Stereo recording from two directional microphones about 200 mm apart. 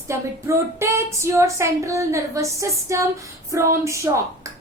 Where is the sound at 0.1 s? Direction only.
15° right (ahead or behind).